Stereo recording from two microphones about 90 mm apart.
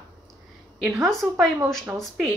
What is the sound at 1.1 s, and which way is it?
Speech, centre (ahead or behind).